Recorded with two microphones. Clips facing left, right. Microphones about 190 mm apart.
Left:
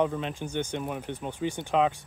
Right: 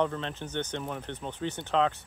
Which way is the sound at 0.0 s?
10° left (ahead or behind).